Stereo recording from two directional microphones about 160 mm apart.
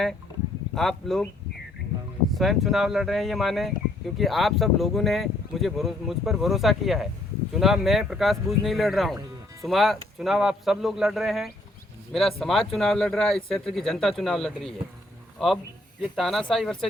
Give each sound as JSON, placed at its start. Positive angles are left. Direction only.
{"t": 0.8, "sound": "speech", "side_deg": 0}
{"t": 2.3, "sound": "speech", "side_deg": 0}